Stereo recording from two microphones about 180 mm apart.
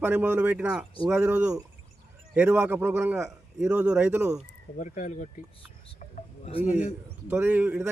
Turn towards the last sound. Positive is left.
turn(degrees=-10)  # may be behind; listen again after turning